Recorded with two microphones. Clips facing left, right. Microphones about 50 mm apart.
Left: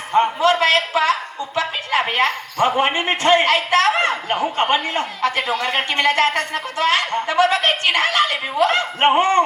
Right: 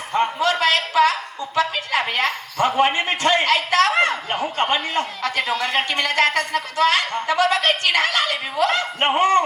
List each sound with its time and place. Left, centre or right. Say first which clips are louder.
0.4 s a man's voice: left 3 dB; left